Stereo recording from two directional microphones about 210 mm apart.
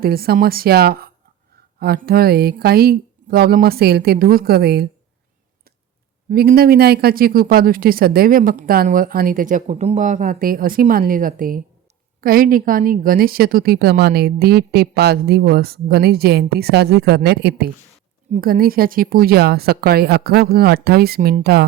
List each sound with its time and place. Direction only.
0.0 s a woman's voice: 45° right (ahead or behind)
6.3 s a woman's voice: 45° right (ahead or behind)